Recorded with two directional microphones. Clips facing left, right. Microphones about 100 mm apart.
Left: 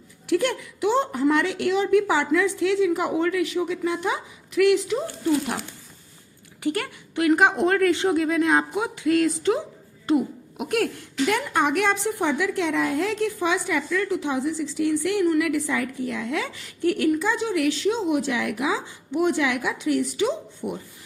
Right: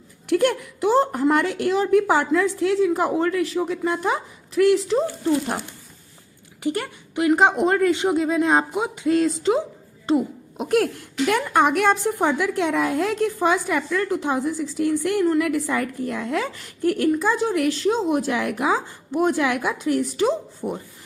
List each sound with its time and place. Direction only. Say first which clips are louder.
0.3 s a woman's voice: right 3 dB; 50° right (ahead or behind); by 5.0 s 35° right (ahead or behind)
6.6 s speech: right 1 dB; 20° right (ahead or behind)
10.1 s a sound: right 1 dB; 25° right (ahead or behind)
11.3 s a woman's voice: right 4 dB; 50° right (ahead or behind)